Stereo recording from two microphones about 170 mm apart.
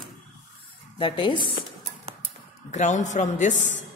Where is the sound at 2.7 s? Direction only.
45° left (ahead or behind).